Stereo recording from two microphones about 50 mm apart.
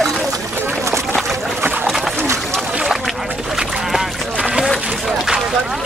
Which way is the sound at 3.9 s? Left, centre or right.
Centre.